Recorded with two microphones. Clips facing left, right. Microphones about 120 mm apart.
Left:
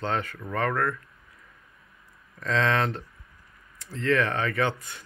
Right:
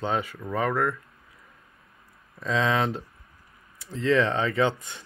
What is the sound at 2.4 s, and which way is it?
Speech, 15° right (ahead or behind).